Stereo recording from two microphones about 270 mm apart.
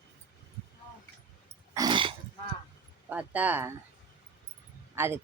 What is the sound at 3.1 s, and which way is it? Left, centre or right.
Speech, centre.